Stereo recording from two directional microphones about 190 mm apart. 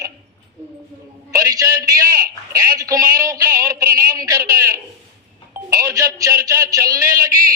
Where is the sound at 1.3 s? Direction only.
15° right (ahead or behind).